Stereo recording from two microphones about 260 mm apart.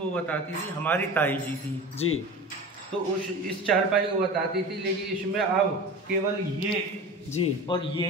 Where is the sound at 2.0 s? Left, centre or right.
Left.